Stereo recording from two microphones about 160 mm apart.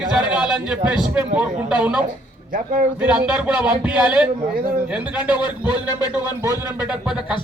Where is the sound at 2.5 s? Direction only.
55° right (ahead or behind).